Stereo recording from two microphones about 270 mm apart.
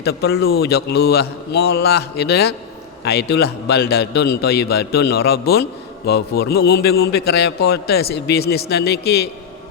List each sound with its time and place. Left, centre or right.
0.0 s a man's voice: left